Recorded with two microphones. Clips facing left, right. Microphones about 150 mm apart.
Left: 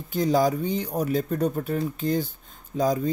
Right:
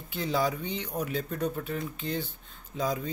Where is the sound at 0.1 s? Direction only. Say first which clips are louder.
Left 7 dB; 40° left (ahead or behind).